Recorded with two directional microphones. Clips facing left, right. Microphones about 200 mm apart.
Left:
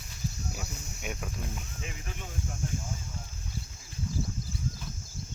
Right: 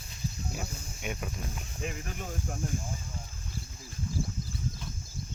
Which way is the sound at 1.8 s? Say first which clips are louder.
Right 5 dB; 45° right (ahead or behind).